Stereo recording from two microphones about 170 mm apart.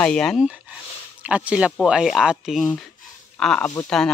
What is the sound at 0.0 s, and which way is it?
Speech, 5° left (ahead or behind).